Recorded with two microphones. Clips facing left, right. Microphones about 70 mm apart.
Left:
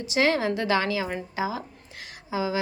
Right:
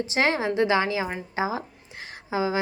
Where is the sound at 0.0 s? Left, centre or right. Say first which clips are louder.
Even; right.